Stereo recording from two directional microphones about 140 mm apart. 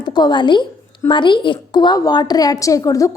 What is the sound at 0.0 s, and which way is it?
A woman's voice, 30° left (ahead or behind).